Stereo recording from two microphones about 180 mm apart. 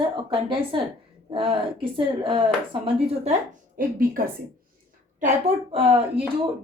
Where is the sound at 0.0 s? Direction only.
30° right (ahead or behind).